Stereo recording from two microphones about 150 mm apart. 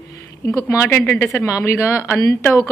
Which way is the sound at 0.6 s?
15° left (ahead or behind).